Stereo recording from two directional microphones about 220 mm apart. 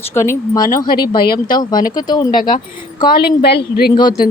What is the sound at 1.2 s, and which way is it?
Speech, 45° left (ahead or behind).